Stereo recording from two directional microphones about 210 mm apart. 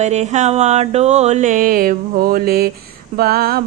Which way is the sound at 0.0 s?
30° right (ahead or behind).